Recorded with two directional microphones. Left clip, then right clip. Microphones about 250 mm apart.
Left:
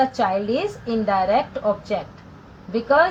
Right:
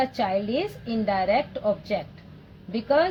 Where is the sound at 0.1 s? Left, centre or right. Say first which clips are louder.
Left 4 dB; centre.